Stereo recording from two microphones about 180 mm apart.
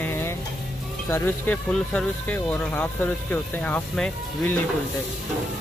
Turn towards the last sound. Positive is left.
turn(degrees=5)  # may be behind; listen again after turning